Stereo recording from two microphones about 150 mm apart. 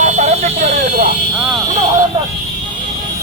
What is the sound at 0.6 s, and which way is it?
Vehicle, 90° right.